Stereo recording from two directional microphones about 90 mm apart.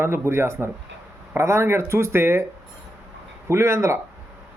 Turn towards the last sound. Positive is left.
turn(degrees=-30)  # may be behind; listen again after turning